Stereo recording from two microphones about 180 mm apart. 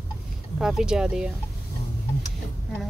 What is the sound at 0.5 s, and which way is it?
Speech, 5° right (ahead or behind).